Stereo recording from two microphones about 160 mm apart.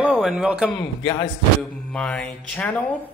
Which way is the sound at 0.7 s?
25° left (ahead or behind).